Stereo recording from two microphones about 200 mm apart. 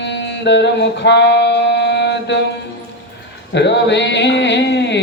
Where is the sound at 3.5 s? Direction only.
60° left (ahead or behind).